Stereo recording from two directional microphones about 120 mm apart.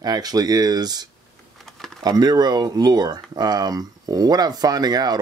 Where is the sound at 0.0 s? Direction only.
35° right (ahead or behind).